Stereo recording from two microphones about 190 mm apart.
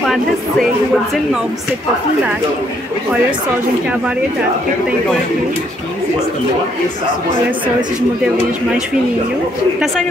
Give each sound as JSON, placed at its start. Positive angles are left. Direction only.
{"t": 0.0, "sound": "speech", "side_deg": 0}